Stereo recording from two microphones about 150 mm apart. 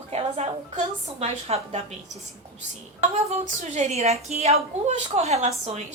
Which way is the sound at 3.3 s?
50° right (ahead or behind).